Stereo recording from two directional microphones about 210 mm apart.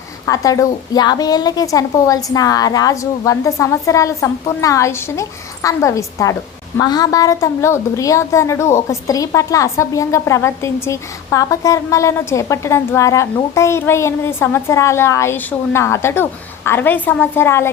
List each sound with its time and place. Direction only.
0.3 s a woman's voice: 15° left (ahead or behind)